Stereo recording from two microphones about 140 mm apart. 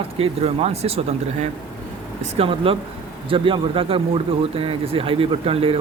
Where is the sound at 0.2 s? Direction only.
45° right (ahead or behind).